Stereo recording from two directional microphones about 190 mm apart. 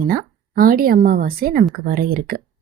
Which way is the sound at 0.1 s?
50° right (ahead or behind).